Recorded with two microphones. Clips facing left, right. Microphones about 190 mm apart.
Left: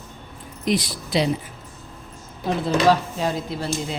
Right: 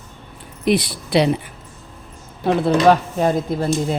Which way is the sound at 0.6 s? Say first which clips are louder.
Right 5 dB; 65° right (ahead or behind).